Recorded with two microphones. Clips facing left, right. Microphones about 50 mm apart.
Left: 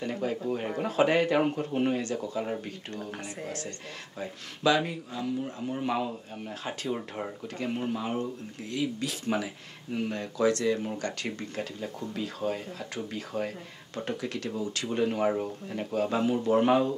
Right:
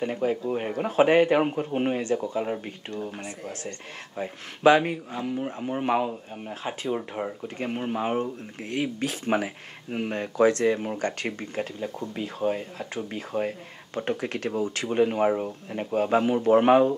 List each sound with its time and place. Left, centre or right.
0.0 s speech: right
4.2 s speech: right
6.3 s speech: centre
7.0 s speech: centre
7.4 s speech: right